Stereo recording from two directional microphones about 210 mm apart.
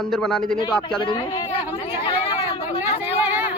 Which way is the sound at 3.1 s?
10° right (ahead or behind).